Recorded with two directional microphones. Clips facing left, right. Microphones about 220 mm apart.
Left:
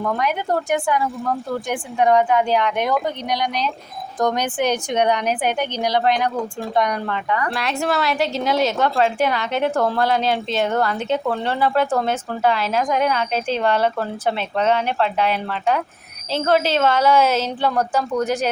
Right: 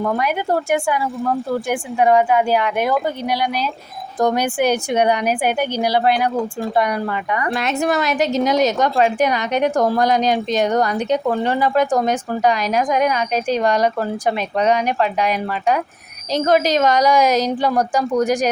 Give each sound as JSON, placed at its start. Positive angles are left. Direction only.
{"t": 0.0, "sound": "speech", "side_deg": -10}